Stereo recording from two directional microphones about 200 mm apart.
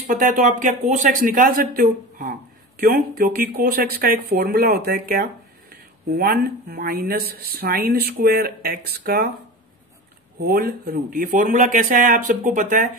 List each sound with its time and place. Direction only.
0.1 s speech: 40° right (ahead or behind)
10.4 s speech: 50° right (ahead or behind)